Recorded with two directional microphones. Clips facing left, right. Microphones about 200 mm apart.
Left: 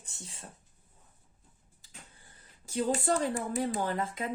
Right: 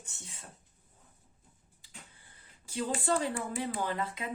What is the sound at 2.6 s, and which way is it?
Speech, 45° left (ahead or behind).